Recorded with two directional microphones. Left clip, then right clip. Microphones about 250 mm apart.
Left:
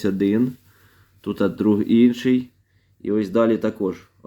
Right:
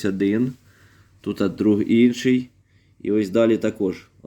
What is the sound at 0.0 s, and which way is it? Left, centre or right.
Speech, centre.